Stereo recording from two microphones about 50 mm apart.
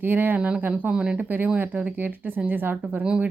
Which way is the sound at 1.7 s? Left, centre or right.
Right.